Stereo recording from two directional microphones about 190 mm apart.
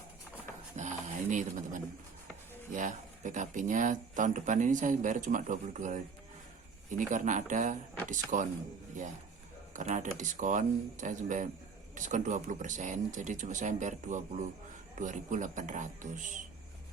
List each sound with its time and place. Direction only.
0.8 s a sound: 40° right (ahead or behind)
2.7 s speech: 40° right (ahead or behind)
7.1 s speech: 40° right (ahead or behind)